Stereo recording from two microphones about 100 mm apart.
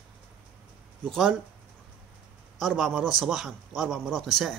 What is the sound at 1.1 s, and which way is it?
Speech, centre (ahead or behind).